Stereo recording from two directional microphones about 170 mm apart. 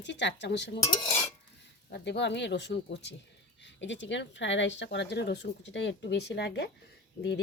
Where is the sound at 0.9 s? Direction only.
20° left (ahead or behind).